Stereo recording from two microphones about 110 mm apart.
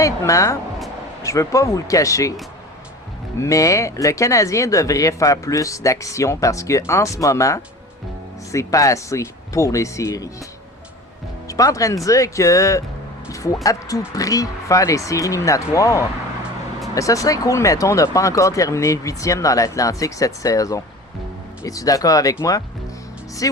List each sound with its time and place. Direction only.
0.0 s speech: 30° left (ahead or behind)
3.4 s speech: 30° left (ahead or behind)
11.4 s speech: 30° left (ahead or behind)